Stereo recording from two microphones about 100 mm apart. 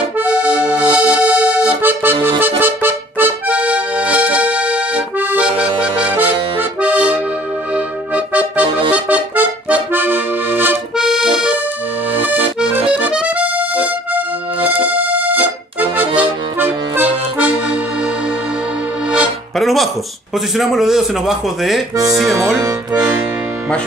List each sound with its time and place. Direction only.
0.2 s accordion: 15° right (ahead or behind)
6.8 s accordion: 15° right (ahead or behind)
11.0 s accordion: 5° right (ahead or behind)
12.5 s accordion: 10° right (ahead or behind)
14.7 s music: 20° right (ahead or behind)
16.2 s accordion: 20° right (ahead or behind)
19.6 s music: centre (ahead or behind)
20.5 s a man's voice: centre (ahead or behind)